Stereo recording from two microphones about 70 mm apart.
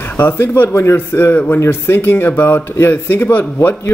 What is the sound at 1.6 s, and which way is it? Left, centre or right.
Speech, left.